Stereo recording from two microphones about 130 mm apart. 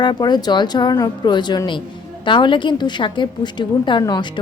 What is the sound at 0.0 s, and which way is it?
A woman's voice, 35° left (ahead or behind).